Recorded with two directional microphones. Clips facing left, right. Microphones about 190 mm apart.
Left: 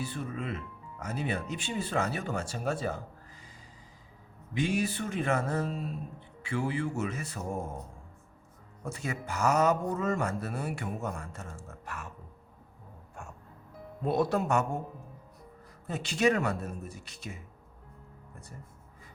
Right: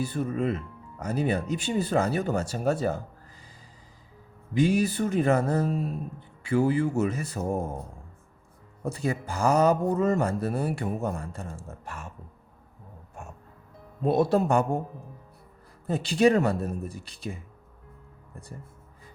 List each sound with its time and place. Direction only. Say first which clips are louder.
0.0 s speech: right 8 dB; 40° right (ahead or behind)
4.5 s speech: right 7 dB; 35° right (ahead or behind)
8.8 s speech: right 7 dB; 35° right (ahead or behind)
14.0 s speech: right 5 dB; 25° right (ahead or behind)
15.9 s speech: right 6 dB; 35° right (ahead or behind)